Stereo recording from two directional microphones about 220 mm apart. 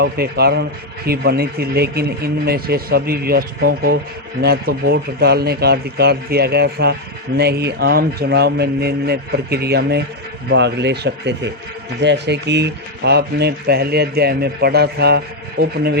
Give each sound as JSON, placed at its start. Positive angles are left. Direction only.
{"t": 0.0, "sound": "speech", "side_deg": -45}